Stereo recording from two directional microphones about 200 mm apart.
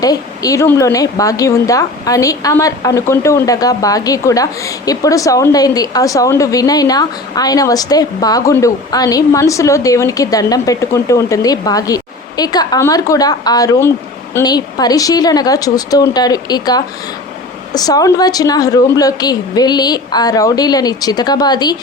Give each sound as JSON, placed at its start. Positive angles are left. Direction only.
{"t": 0.0, "sound": "a woman's voice", "side_deg": 20}